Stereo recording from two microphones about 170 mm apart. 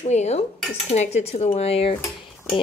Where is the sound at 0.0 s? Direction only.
40° left (ahead or behind).